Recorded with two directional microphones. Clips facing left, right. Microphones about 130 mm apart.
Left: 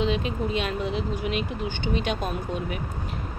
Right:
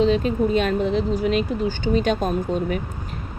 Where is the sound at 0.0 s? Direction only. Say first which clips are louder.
Right 7 dB; 40° right (ahead or behind).